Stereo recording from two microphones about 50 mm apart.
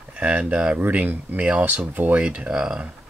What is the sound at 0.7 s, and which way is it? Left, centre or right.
Speech, right.